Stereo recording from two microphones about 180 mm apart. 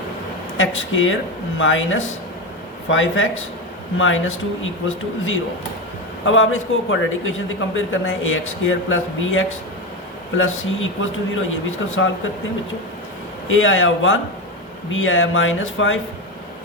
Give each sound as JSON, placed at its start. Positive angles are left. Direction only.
{"t": 0.5, "sound": "a man's voice", "side_deg": 90}
{"t": 6.2, "sound": "a man's voice", "side_deg": 90}
{"t": 13.5, "sound": "a man's voice", "side_deg": 90}